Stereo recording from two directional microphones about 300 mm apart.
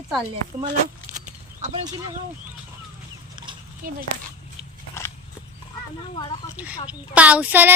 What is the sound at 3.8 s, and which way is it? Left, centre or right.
Speech, right.